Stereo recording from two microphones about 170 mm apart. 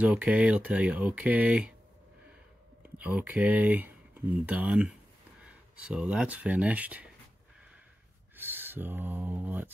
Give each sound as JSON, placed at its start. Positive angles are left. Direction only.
{"t": 0.0, "sound": "speech", "side_deg": -5}
{"t": 3.0, "sound": "speech", "side_deg": -10}
{"t": 8.4, "sound": "speech", "side_deg": -10}